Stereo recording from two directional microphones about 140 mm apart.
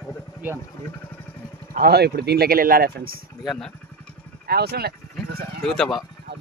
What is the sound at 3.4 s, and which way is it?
Speech, 5° left (ahead or behind).